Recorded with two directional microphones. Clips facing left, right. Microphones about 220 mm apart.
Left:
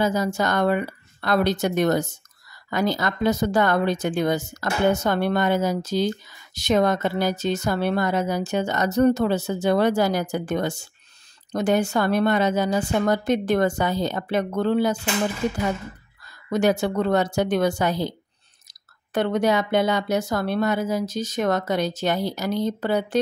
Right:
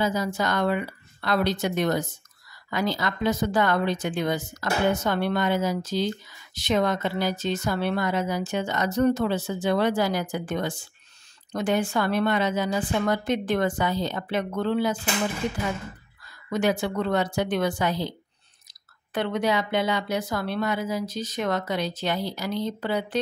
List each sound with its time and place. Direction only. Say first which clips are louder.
0.0 s speech: left 3 dB; 45° left (ahead or behind)
16.4 s speech: left 4 dB; 40° left (ahead or behind)